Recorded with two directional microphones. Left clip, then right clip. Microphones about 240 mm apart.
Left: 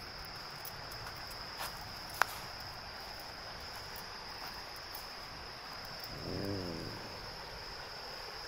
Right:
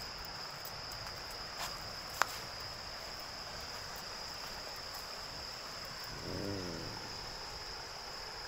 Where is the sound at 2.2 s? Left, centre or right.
Centre.